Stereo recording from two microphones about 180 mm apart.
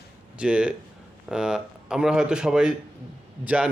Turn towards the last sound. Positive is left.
turn(degrees=-5)  # may be behind; listen again after turning